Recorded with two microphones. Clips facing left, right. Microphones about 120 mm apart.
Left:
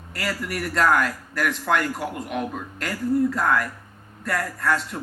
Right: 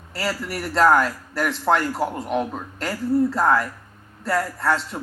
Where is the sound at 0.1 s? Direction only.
30° right (ahead or behind).